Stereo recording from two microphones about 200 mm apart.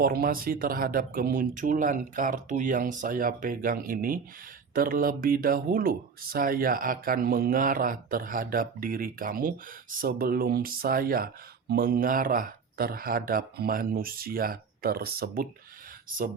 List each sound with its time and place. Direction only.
0.0 s speech: 50° right (ahead or behind)